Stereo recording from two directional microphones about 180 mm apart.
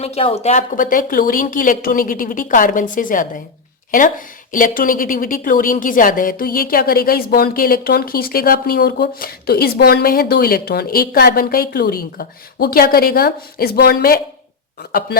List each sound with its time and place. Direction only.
0.0 s a woman's voice: 35° left (ahead or behind)
4.5 s a woman's voice: 50° left (ahead or behind)